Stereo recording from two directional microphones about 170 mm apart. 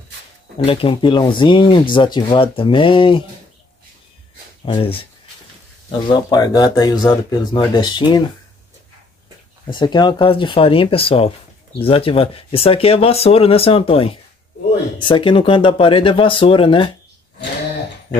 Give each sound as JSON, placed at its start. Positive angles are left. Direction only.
{"t": 0.7, "sound": "speech", "side_deg": 30}
{"t": 4.6, "sound": "speech", "side_deg": 30}
{"t": 9.7, "sound": "speech", "side_deg": 25}